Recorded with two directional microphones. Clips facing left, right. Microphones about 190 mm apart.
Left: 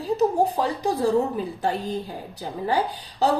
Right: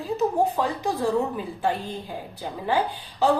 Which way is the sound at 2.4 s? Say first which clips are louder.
Left 1 dB; 45° left (ahead or behind).